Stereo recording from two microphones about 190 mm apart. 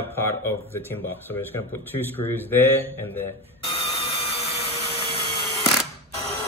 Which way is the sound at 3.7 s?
30° left (ahead or behind).